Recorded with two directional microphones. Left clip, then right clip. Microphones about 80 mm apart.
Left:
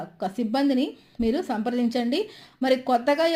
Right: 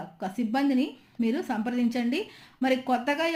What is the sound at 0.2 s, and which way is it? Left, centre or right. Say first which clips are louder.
Speech: left 3 dB; left.